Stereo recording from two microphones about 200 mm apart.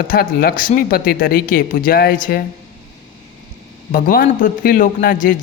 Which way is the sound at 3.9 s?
45° left (ahead or behind).